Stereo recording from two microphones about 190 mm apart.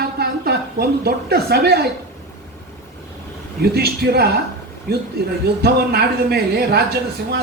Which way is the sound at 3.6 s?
55° right (ahead or behind).